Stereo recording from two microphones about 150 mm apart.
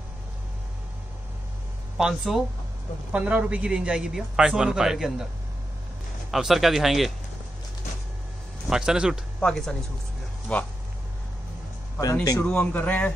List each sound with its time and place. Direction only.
2.0 s a man's voice: 5° right (ahead or behind)
6.3 s a man's voice: centre (ahead or behind)
8.6 s a man's voice: 5° right (ahead or behind)
12.0 s speech: 25° left (ahead or behind)
12.4 s a man's voice: 10° left (ahead or behind)